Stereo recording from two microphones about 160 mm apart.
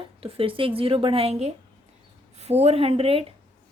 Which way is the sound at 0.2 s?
35° right (ahead or behind).